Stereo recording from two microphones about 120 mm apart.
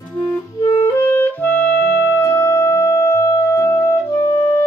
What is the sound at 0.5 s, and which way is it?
Clarinet, 30° left (ahead or behind).